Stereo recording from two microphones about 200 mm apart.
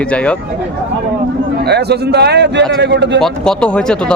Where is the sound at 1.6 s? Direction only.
55° right (ahead or behind).